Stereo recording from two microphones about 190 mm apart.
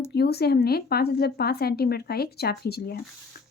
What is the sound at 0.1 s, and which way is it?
A woman's voice, 55° left (ahead or behind).